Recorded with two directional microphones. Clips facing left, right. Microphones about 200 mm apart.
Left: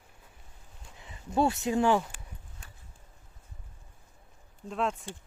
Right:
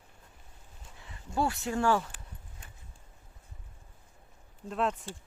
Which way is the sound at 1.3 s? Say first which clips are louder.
Left 4 dB; 20° left (ahead or behind).